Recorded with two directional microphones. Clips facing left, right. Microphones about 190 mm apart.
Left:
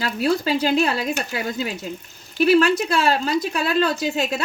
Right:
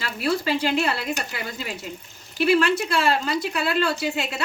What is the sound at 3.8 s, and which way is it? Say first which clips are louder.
Speech: left 3 dB; 40° left (ahead or behind).